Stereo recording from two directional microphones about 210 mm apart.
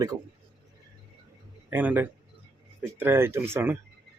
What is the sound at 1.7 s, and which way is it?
Speech, 10° right (ahead or behind).